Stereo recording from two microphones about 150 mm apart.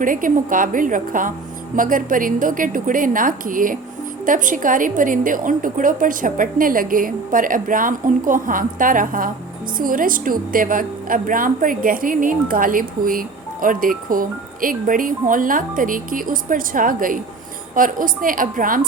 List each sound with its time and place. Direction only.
0.0 s a woman's voice: 65° right (ahead or behind)